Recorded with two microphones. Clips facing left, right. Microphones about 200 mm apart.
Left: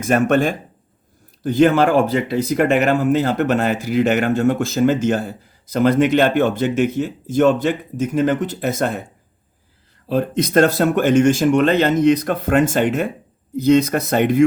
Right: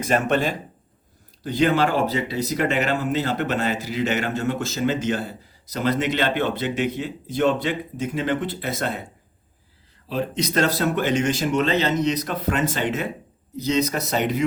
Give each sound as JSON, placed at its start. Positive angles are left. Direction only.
{"t": 0.0, "sound": "speech", "side_deg": 50}
{"t": 10.1, "sound": "speech", "side_deg": 50}